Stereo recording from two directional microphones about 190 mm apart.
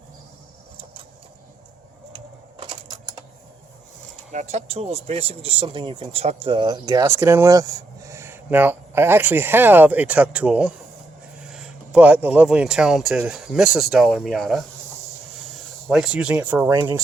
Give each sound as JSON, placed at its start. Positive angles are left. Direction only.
{"t": 2.6, "sound": "typing", "side_deg": -20}
{"t": 4.3, "sound": "speech", "side_deg": -40}
{"t": 15.9, "sound": "speech", "side_deg": -5}